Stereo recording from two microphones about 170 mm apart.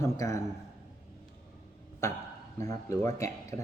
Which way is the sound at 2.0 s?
15° left (ahead or behind).